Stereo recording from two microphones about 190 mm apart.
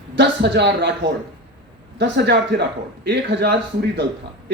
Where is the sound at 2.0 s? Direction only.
60° right (ahead or behind).